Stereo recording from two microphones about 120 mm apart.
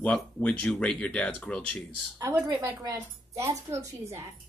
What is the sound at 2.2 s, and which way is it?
Speech, 20° right (ahead or behind).